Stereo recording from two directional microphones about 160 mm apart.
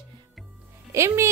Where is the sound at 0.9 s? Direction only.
15° right (ahead or behind).